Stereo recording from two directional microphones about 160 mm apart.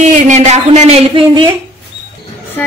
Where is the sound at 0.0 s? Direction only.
45° right (ahead or behind).